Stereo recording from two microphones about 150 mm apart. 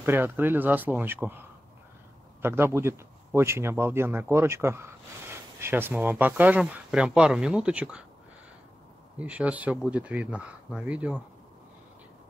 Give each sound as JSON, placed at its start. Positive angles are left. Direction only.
{"t": 0.0, "sound": "speech", "side_deg": -15}
{"t": 2.4, "sound": "speech", "side_deg": -15}
{"t": 9.2, "sound": "speech", "side_deg": -10}